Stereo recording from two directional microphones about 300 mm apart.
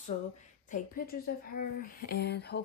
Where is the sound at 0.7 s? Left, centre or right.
Left.